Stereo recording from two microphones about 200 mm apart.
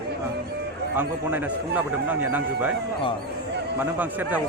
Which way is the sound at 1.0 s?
10° right (ahead or behind).